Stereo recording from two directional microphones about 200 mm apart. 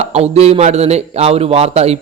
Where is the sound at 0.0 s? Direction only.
30° right (ahead or behind).